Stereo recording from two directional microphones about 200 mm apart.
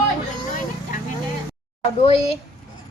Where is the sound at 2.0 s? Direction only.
30° left (ahead or behind).